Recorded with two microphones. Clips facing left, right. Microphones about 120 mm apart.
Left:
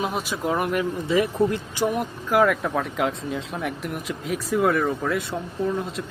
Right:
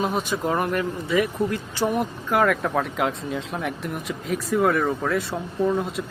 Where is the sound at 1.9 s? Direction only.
Centre (ahead or behind).